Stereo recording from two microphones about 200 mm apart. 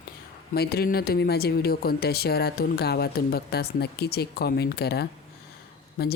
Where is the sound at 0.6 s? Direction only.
50° left (ahead or behind).